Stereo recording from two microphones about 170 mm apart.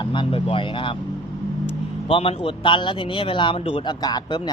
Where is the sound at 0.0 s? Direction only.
30° left (ahead or behind).